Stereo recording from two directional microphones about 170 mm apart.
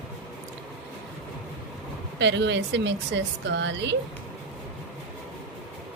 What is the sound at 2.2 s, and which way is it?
A woman's voice, 90° right.